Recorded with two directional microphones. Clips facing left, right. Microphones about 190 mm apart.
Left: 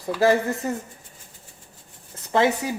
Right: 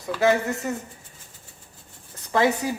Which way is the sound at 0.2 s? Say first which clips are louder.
Left 1 dB; 35° left (ahead or behind).